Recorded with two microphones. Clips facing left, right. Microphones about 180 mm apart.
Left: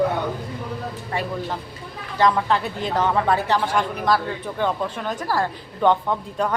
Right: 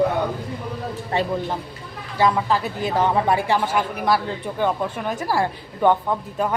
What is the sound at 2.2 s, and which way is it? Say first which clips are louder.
Speech: even; 5° right (ahead or behind).